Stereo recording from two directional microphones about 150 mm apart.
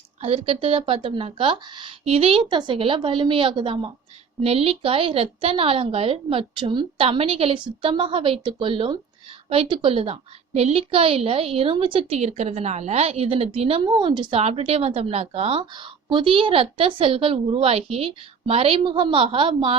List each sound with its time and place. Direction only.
0.2 s a woman's voice: 40° right (ahead or behind)